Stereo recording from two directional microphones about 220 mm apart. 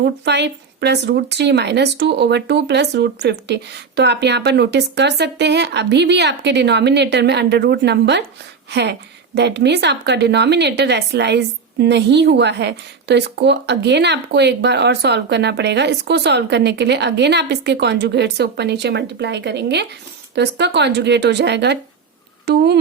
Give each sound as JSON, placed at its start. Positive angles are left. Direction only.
{"t": 0.0, "sound": "a woman's voice", "side_deg": -50}